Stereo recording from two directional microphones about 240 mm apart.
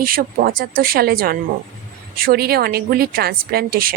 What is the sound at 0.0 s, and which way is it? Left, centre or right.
Speech, right.